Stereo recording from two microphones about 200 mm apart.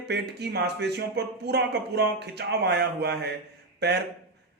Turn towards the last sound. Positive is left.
turn(degrees=-55)  # may be behind; listen again after turning